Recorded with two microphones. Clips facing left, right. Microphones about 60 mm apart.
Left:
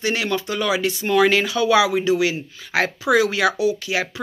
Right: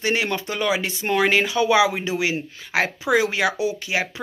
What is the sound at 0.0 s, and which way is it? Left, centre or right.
Speech, right.